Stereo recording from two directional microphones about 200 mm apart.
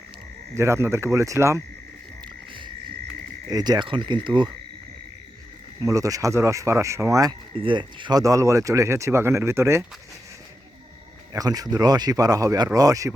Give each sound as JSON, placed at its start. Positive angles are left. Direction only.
{"t": 0.5, "sound": "speech", "side_deg": -15}
{"t": 3.5, "sound": "speech", "side_deg": -20}
{"t": 5.8, "sound": "speech", "side_deg": -15}
{"t": 11.3, "sound": "speech", "side_deg": -20}